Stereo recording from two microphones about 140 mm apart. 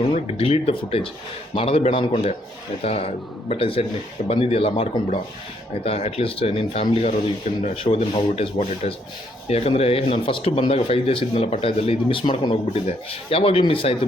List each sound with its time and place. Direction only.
0.0 s speech: 45° left (ahead or behind)
12.8 s speech: 45° left (ahead or behind)